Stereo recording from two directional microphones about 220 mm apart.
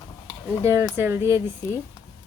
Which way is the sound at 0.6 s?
10° right (ahead or behind).